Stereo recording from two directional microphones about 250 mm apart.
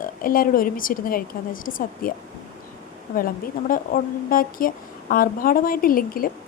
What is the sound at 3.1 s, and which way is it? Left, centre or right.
A woman's voice, left.